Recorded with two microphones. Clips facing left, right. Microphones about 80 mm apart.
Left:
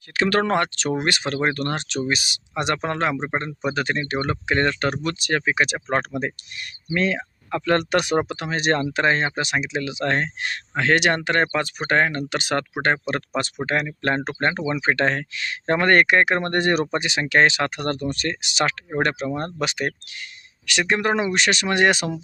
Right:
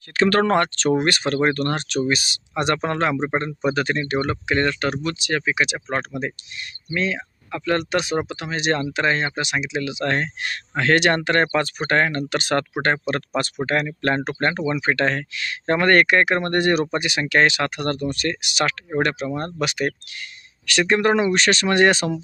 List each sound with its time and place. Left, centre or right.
0.1 s speech: centre
4.9 s speech: left
20.7 s speech: centre